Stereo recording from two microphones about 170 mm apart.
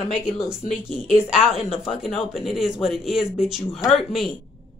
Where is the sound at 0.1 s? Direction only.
5° right (ahead or behind).